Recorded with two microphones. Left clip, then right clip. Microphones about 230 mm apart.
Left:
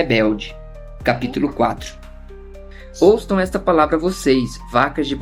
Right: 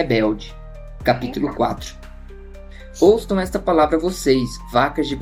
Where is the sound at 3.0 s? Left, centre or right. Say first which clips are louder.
Left 1 dB; left.